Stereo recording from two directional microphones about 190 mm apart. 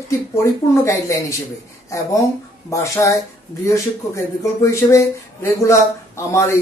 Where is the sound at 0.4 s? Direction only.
15° left (ahead or behind).